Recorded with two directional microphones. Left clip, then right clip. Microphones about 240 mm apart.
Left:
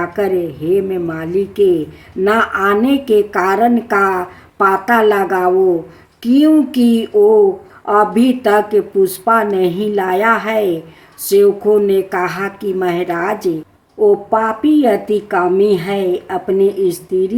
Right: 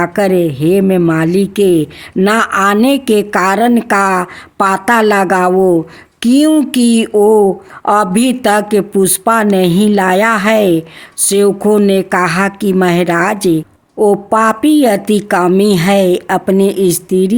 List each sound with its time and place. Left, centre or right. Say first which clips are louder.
0.0 s speech: right 5 dB; right